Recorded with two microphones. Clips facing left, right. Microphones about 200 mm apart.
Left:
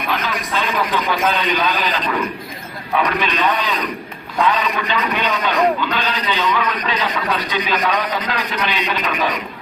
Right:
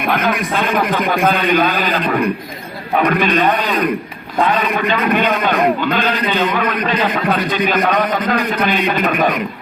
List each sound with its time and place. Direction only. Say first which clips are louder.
0.0 s a man's voice: right 6 dB; 50° right (ahead or behind)